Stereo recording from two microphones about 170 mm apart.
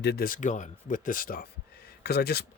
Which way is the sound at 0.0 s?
70° left (ahead or behind).